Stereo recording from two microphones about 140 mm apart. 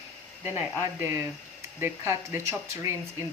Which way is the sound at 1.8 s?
20° right (ahead or behind).